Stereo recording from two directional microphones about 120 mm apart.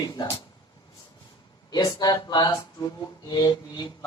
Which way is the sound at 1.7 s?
35° left (ahead or behind).